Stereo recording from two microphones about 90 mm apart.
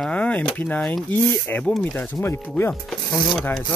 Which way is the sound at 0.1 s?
15° left (ahead or behind).